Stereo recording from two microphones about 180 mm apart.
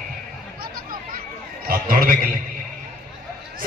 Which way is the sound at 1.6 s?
55° right (ahead or behind).